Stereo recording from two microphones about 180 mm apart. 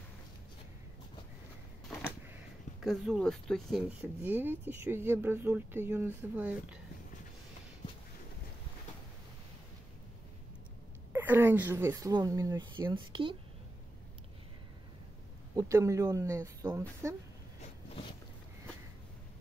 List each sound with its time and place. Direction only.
1.9 s a sound: 5° left (ahead or behind)
2.8 s speech: centre (ahead or behind)
4.0 s speech: 10° right (ahead or behind)
11.1 s speech: 10° right (ahead or behind); by 13.4 s 25° right (ahead or behind)
15.5 s speech: 15° right (ahead or behind)